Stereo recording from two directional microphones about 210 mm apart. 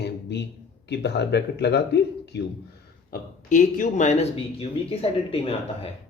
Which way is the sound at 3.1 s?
40° left (ahead or behind).